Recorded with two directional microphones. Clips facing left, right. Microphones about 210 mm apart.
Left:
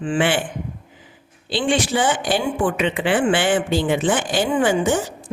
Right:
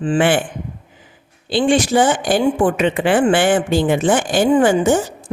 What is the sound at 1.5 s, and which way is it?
Speech, 45° right (ahead or behind).